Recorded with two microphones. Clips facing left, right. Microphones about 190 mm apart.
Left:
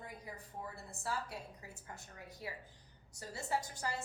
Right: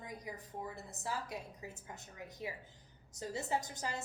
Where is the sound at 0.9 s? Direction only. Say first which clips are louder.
Left 1 dB; 20° right (ahead or behind).